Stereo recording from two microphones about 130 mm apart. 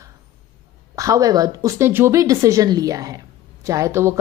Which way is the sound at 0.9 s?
25° right (ahead or behind).